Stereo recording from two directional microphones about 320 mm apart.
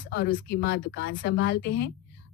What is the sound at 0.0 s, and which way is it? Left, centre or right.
A woman's voice, left.